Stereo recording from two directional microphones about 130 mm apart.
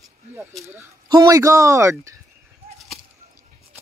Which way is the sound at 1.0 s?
35° right (ahead or behind).